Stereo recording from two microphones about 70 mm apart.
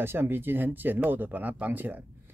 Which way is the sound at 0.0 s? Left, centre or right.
Right.